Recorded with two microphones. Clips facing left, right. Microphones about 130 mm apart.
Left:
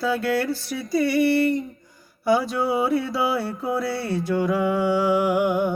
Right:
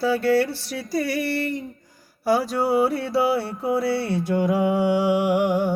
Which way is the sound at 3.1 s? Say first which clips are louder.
Right 2 dB; 30° right (ahead or behind).